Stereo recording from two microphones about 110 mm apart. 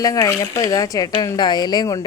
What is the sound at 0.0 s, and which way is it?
A woman's voice, 35° left (ahead or behind).